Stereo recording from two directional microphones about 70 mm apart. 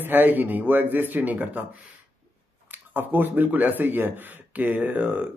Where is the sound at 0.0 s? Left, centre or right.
Right.